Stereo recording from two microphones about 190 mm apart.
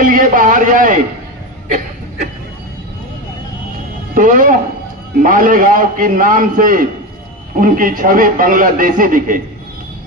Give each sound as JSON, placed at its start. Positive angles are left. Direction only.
{"t": 0.0, "sound": "a man's voice", "side_deg": -45}
{"t": 4.1, "sound": "a man's voice", "side_deg": -45}